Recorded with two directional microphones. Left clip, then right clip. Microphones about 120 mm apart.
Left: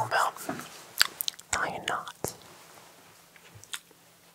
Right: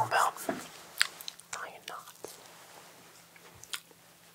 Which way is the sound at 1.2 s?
85° left.